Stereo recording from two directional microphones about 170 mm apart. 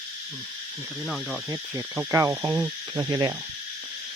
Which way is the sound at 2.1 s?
15° right (ahead or behind).